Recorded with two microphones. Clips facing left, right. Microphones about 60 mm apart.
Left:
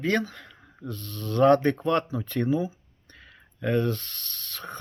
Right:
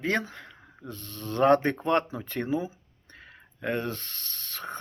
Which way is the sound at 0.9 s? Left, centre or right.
Right.